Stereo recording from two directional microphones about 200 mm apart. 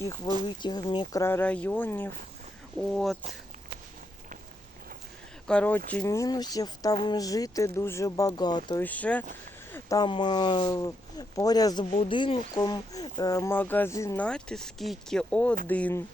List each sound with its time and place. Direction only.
0.4 s speech: 20° left (ahead or behind); by 3.2 s centre (ahead or behind)
5.5 s speech: 5° left (ahead or behind)
8.8 s speech: 5° left (ahead or behind)
9.7 s speech: 20° left (ahead or behind)